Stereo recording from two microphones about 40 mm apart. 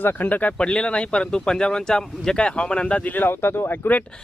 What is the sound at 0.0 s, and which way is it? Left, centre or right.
Speech, left.